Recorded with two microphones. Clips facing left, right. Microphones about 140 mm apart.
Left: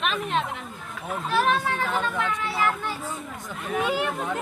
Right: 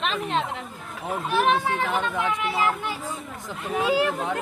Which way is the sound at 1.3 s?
15° right (ahead or behind).